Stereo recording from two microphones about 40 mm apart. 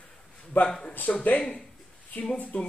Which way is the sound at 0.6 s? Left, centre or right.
Left.